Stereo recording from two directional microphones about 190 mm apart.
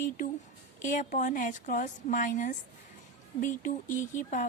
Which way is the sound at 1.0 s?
40° left (ahead or behind).